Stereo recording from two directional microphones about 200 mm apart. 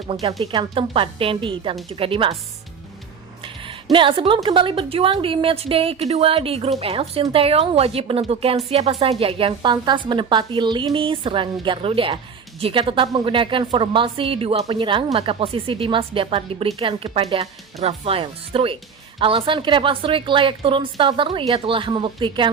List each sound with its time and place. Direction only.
0.1 s a woman's voice: 30° right (ahead or behind)
3.4 s a sound: 25° right (ahead or behind)
3.9 s a woman's voice: 25° right (ahead or behind)